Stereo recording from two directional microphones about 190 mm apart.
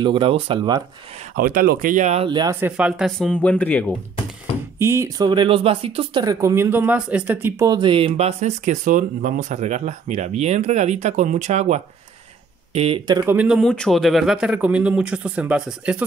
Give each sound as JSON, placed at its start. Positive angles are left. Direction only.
{"t": 0.0, "sound": "speech", "side_deg": -25}
{"t": 1.3, "sound": "speech", "side_deg": -50}
{"t": 2.2, "sound": "speech", "side_deg": -25}
{"t": 2.6, "sound": "speech", "side_deg": -5}
{"t": 4.7, "sound": "speech", "side_deg": -15}
{"t": 13.2, "sound": "speech", "side_deg": -10}